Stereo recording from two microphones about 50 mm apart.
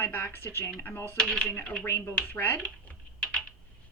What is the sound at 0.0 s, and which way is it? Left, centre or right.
Speech, left.